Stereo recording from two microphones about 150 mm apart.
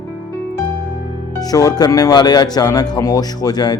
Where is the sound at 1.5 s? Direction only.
25° left (ahead or behind).